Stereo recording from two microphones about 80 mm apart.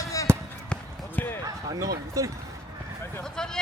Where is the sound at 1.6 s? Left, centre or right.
Right.